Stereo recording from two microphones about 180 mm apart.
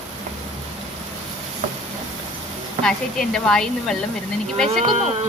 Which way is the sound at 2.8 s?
5° left (ahead or behind).